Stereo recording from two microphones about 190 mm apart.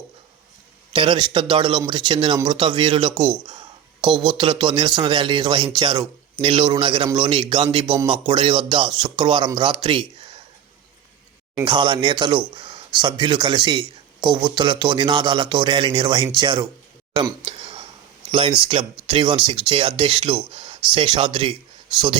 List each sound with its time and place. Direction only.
0.9 s speech: 25° right (ahead or behind)
11.6 s speech: 25° right (ahead or behind)
17.4 s a sound: 30° right (ahead or behind)
18.3 s speech: 30° right (ahead or behind)